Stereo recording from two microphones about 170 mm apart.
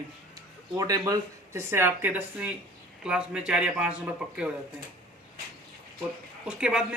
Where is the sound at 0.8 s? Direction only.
20° right (ahead or behind); by 4.4 s 5° right (ahead or behind).